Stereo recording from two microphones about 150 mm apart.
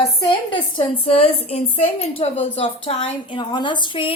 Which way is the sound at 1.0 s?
40° left (ahead or behind).